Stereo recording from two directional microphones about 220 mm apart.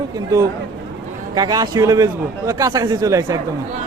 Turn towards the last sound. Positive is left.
turn(degrees=-15)  # may be behind; listen again after turning